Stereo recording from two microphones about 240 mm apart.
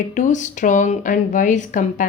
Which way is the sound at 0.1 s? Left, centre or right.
Left.